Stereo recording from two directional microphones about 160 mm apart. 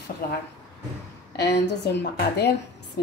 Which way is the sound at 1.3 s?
90° left.